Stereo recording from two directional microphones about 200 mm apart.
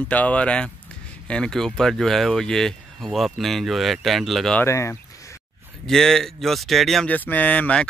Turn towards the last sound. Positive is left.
turn(degrees=5)  # may be behind; listen again after turning